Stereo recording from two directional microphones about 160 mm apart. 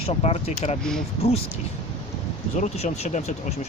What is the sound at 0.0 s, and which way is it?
Speech, 40° left (ahead or behind).